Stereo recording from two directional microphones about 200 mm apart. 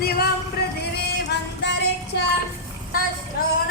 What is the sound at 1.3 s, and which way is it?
Music, 60° left (ahead or behind).